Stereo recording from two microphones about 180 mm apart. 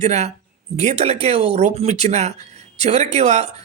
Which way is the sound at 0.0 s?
35° right (ahead or behind).